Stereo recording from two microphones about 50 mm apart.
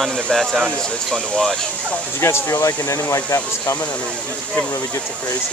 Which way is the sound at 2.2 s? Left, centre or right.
Left.